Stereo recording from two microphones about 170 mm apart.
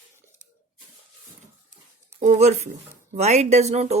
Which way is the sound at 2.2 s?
40° right (ahead or behind).